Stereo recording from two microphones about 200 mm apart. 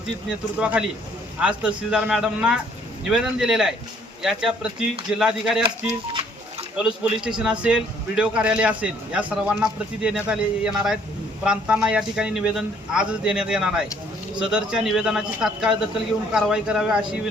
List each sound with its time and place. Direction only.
0.3 s a man's voice: 5° right (ahead or behind)
5.9 s a sound: 30° right (ahead or behind)
6.7 s a man's voice: 5° right (ahead or behind)